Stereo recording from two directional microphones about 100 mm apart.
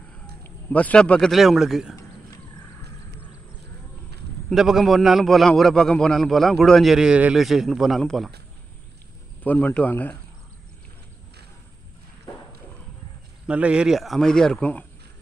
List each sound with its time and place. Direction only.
0.4 s speech: 15° left (ahead or behind)
1.3 s a man's voice: centre (ahead or behind)
4.5 s a man's voice: 5° right (ahead or behind)
9.4 s speech: 15° left (ahead or behind)
13.5 s speech: 10° right (ahead or behind)
13.9 s speech: centre (ahead or behind)